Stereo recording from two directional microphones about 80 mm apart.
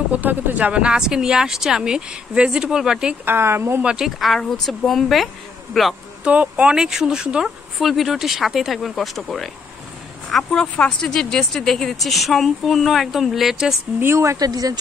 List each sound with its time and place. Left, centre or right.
0.1 s speech: right
3.3 s speech: right
3.8 s speech: centre
6.2 s speech: centre
14.1 s speech: right
14.5 s speech: right